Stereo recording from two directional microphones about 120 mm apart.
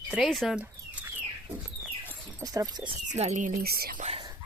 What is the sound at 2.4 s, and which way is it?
Speech, 30° right (ahead or behind).